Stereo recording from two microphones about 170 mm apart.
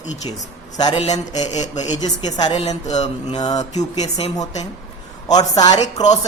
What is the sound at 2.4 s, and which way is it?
Speech, 25° left (ahead or behind).